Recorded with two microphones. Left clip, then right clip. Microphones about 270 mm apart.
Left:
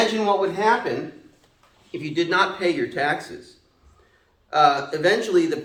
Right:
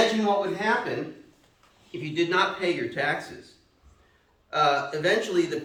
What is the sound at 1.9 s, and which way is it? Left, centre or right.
A man's voice, centre.